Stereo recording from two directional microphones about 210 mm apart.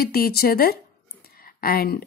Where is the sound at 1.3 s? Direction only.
45° left (ahead or behind).